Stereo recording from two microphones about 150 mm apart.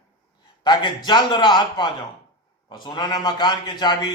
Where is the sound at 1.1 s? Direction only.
30° left (ahead or behind).